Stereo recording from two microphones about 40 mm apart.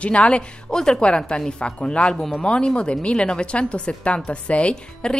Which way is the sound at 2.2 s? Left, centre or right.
Centre.